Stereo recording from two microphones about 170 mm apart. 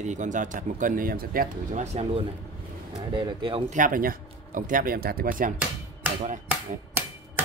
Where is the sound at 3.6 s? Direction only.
50° right (ahead or behind).